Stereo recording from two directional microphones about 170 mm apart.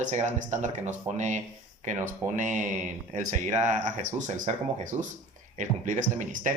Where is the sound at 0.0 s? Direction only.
45° right (ahead or behind).